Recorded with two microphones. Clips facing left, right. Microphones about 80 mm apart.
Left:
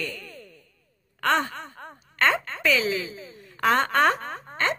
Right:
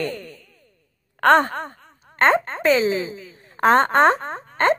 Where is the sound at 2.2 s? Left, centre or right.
Right.